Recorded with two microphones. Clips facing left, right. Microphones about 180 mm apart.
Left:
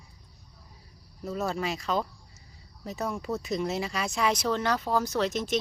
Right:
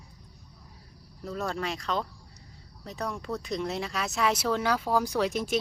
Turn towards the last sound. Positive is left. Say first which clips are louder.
# even
turn(degrees=-10)  # may be behind; listen again after turning